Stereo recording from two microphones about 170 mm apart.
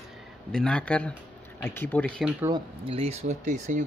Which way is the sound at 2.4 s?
20° right (ahead or behind).